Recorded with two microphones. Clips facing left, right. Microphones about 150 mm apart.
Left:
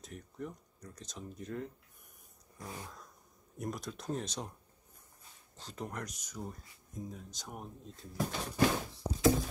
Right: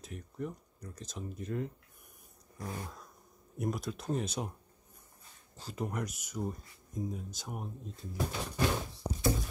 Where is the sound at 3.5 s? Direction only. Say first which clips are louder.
Right 4 dB; 5° right (ahead or behind).